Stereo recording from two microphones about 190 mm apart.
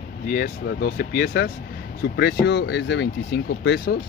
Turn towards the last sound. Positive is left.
turn(degrees=65)  # may be behind; listen again after turning